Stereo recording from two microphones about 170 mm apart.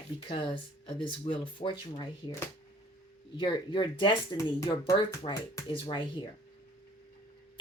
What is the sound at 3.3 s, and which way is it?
Speech, 30° left (ahead or behind).